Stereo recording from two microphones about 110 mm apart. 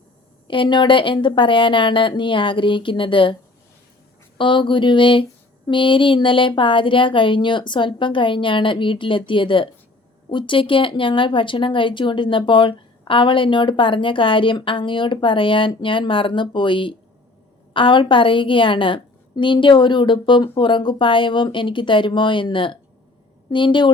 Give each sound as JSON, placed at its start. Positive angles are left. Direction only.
{"t": 0.4, "sound": "speech", "side_deg": 50}
{"t": 4.4, "sound": "speech", "side_deg": 50}